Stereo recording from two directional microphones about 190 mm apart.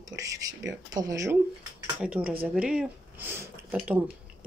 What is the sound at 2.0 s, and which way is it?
Speech, 5° right (ahead or behind).